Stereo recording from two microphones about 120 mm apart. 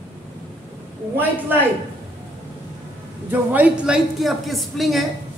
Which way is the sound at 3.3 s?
15° right (ahead or behind).